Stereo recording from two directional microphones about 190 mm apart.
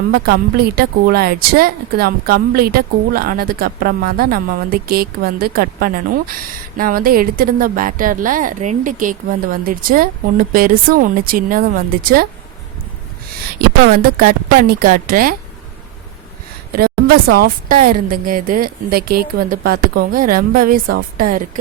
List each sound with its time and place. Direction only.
0.3 s speech: 55° right (ahead or behind)
13.6 s speech: 50° right (ahead or behind)
17.3 s speech: 50° right (ahead or behind)